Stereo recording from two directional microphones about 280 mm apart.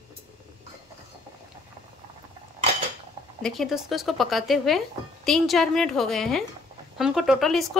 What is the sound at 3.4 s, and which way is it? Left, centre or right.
Speech, centre.